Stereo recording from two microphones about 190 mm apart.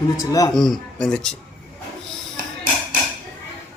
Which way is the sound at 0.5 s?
Centre (ahead or behind).